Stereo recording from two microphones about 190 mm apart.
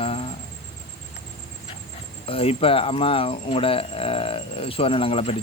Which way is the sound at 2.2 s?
30° left (ahead or behind).